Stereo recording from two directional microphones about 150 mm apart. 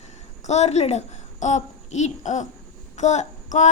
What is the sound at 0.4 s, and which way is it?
A child's voice, 50° left (ahead or behind).